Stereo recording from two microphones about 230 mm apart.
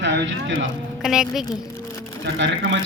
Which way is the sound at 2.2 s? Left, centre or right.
Right.